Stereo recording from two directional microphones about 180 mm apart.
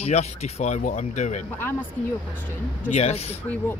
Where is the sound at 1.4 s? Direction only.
10° left (ahead or behind).